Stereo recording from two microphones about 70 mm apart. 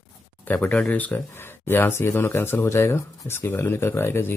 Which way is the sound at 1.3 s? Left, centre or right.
Left.